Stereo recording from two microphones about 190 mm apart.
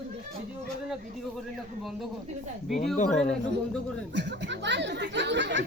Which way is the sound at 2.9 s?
35° left (ahead or behind).